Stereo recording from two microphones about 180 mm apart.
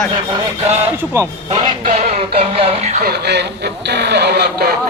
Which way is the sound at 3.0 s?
70° right (ahead or behind).